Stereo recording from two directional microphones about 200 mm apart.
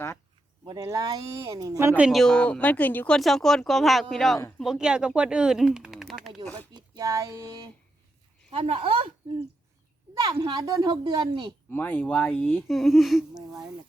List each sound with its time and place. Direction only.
0.6 s speech: 20° right (ahead or behind); by 4.4 s centre (ahead or behind)
4.4 s speech: 10° left (ahead or behind)
4.6 s speech: 5° right (ahead or behind)
6.7 s speech: 20° right (ahead or behind)
8.4 s speech: 30° right (ahead or behind)
10.2 s speech: 20° right (ahead or behind)
11.7 s speech: 10° left (ahead or behind)